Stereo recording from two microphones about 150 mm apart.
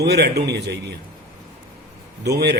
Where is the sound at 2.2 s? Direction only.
90° right.